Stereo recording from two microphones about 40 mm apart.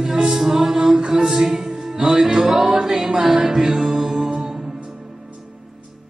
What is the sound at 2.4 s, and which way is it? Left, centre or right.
Music, centre.